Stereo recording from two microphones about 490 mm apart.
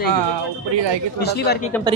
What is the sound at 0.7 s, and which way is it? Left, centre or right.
Speech, right.